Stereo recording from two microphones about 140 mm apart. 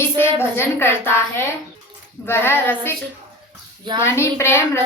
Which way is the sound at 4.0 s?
20° left (ahead or behind).